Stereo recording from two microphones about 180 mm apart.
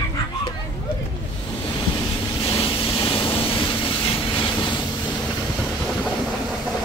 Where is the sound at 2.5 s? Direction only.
30° left (ahead or behind).